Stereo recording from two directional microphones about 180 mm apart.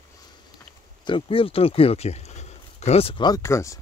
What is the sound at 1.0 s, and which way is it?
Speech, 30° left (ahead or behind).